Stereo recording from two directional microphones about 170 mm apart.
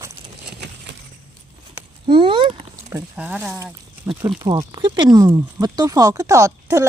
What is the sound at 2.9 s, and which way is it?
Speech, 10° right (ahead or behind).